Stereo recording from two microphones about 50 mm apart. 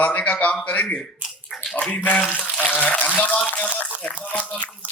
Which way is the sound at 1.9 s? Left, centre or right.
Left.